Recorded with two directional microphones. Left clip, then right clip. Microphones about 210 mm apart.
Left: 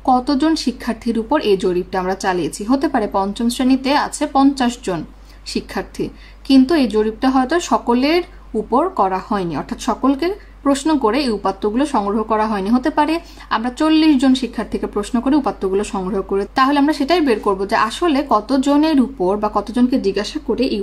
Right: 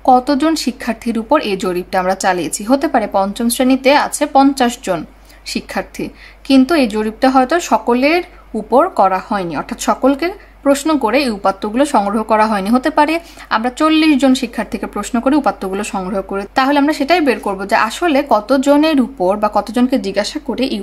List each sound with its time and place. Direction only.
0.0 s a woman's voice: 15° right (ahead or behind)